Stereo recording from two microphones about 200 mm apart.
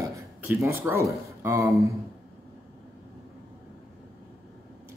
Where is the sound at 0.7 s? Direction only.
15° right (ahead or behind).